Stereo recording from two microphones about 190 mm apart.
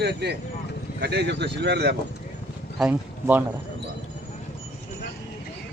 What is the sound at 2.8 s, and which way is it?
Speech, 10° right (ahead or behind).